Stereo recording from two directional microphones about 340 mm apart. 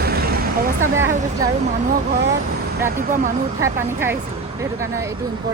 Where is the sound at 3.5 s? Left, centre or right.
Centre.